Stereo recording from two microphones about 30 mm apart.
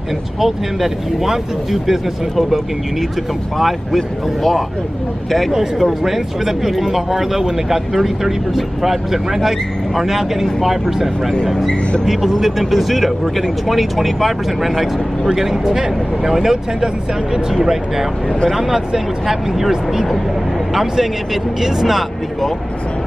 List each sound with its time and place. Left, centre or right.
0.4 s speech: centre
3.5 s speech: centre
5.8 s speech: centre
15.6 s speech: right
20.7 s speech: centre